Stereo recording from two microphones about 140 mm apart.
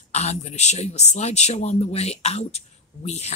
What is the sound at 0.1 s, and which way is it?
Speech, 50° left (ahead or behind).